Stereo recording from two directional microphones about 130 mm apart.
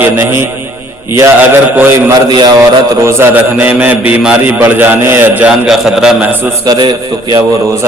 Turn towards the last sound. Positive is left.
turn(degrees=-25)  # may be behind; listen again after turning